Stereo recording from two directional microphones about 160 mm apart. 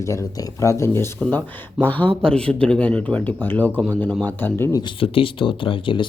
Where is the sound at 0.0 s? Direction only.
20° left (ahead or behind).